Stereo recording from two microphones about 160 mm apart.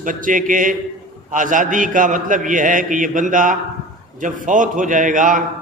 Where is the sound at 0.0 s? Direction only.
55° right (ahead or behind).